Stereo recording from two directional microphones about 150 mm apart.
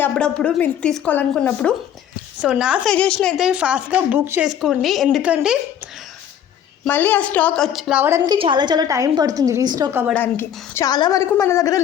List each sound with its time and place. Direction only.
0.0 s speech: 5° left (ahead or behind)
2.4 s a woman's voice: 5° right (ahead or behind)
2.9 s a woman's voice: 5° left (ahead or behind)
6.8 s speech: 15° left (ahead or behind)
8.0 s speech: 20° right (ahead or behind)
8.4 s a woman's voice: 30° right (ahead or behind)
10.2 s a woman's voice: 15° left (ahead or behind)